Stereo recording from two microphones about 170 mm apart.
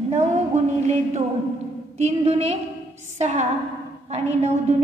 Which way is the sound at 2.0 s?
35° right (ahead or behind).